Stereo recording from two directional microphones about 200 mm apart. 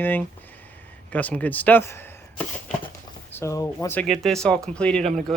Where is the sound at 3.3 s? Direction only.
15° left (ahead or behind).